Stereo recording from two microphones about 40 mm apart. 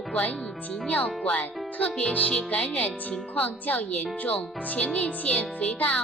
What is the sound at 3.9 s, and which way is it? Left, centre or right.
Speech, left.